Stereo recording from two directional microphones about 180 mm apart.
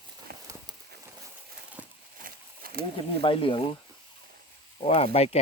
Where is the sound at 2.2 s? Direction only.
55° right (ahead or behind).